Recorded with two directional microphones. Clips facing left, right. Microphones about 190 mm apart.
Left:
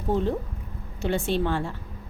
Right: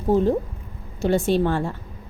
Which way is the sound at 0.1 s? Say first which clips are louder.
Right 6 dB; 40° right (ahead or behind).